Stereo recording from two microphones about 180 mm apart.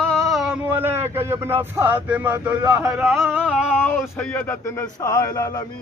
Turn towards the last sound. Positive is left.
turn(degrees=20)  # may be behind; listen again after turning